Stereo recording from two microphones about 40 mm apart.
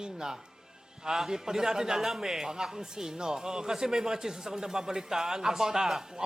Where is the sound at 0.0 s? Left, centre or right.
Centre.